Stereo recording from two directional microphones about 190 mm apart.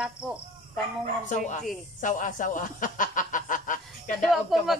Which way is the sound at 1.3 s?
40° left (ahead or behind).